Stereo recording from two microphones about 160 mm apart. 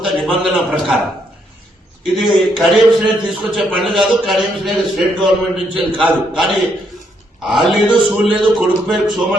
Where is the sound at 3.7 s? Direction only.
Centre (ahead or behind).